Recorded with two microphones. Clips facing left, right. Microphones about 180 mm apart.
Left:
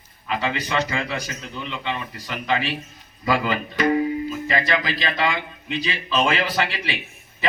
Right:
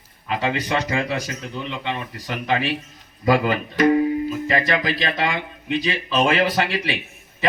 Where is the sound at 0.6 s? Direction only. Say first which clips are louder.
Right 2 dB; 40° right (ahead or behind).